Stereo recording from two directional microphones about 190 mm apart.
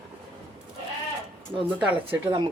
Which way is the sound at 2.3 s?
25° right (ahead or behind).